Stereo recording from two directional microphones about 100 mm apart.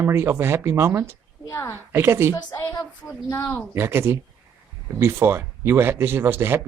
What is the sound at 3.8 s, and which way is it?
Speech, 25° right (ahead or behind).